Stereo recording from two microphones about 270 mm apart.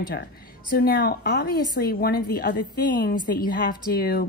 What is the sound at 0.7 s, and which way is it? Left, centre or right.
Speech, left.